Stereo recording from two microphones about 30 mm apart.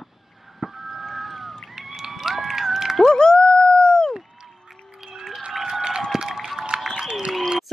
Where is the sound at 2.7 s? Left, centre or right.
Centre.